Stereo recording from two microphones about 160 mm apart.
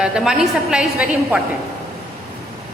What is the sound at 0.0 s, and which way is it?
A woman's voice, 5° right (ahead or behind).